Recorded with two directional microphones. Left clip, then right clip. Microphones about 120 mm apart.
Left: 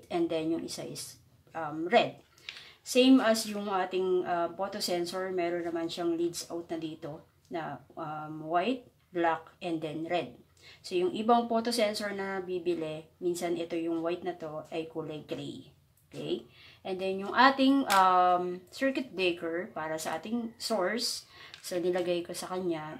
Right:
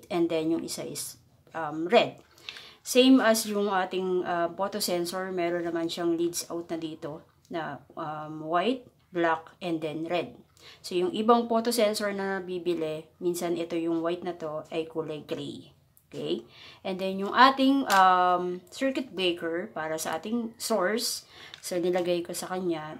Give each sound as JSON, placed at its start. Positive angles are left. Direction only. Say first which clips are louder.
{"t": 0.1, "sound": "speech", "louder": "right 4 dB", "side_deg": -30}
{"t": 16.8, "sound": "speech", "louder": "right 2 dB", "side_deg": -40}